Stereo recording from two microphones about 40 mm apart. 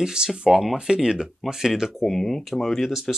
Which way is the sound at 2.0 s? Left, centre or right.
Centre.